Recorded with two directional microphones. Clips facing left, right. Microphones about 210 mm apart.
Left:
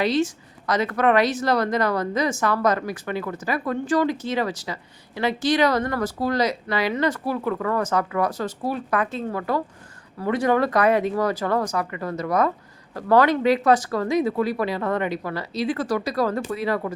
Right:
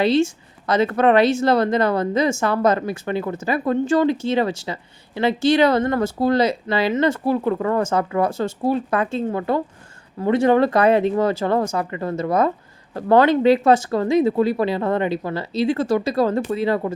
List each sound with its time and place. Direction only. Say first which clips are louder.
0.0 s speech: right 4 dB; 25° right (ahead or behind)